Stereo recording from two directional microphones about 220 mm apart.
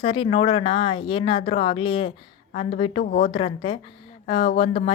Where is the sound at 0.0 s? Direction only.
25° left (ahead or behind).